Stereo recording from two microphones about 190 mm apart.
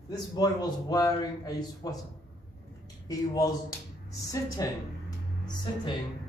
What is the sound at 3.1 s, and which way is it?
Speech, 15° left (ahead or behind).